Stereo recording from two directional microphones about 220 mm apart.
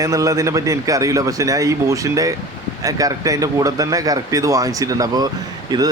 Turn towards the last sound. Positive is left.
turn(degrees=-20)  # may be behind; listen again after turning